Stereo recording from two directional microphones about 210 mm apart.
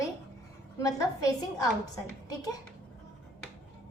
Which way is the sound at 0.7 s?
15° left (ahead or behind).